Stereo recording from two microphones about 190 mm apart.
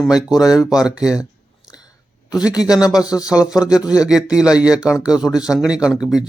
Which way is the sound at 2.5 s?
20° left (ahead or behind).